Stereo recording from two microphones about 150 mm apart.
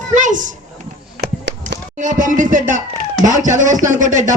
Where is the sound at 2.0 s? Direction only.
60° right (ahead or behind).